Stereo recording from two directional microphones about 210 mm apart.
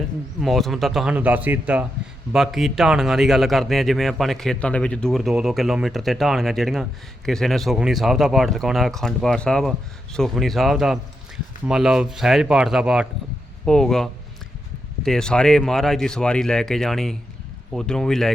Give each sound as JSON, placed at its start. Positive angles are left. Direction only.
{"t": 0.4, "sound": "speech", "side_deg": 0}